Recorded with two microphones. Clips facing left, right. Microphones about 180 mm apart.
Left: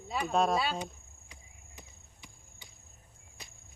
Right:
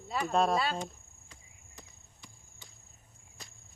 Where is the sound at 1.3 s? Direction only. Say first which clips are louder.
Left 2 dB; 20° left (ahead or behind).